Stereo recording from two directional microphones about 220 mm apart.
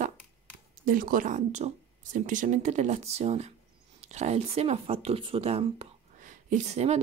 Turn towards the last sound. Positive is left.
turn(degrees=-30)  # may be behind; listen again after turning